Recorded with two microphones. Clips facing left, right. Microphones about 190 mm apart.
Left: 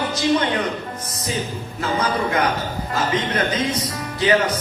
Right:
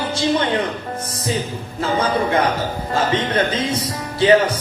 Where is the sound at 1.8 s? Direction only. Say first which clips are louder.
Right 3 dB; 30° right (ahead or behind).